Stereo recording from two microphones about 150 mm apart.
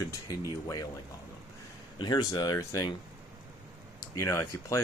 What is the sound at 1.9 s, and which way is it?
Speech, 30° left (ahead or behind).